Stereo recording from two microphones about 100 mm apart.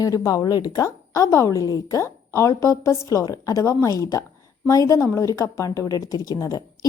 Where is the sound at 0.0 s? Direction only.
35° left (ahead or behind).